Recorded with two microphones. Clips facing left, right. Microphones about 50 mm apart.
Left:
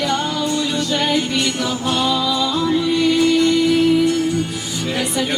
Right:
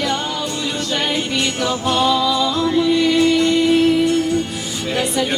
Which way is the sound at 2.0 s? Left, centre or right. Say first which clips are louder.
Right 3 dB; centre.